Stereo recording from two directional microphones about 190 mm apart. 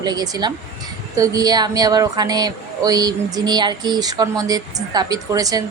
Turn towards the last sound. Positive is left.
turn(degrees=-20)  # may be behind; listen again after turning